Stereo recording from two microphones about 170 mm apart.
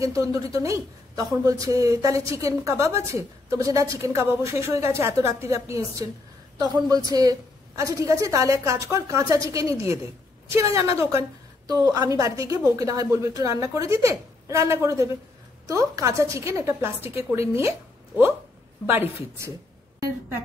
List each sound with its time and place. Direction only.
0.0 s a woman's voice: 20° right (ahead or behind)